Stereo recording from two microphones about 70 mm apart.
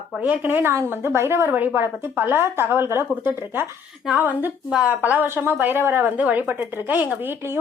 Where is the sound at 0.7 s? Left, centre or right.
Right.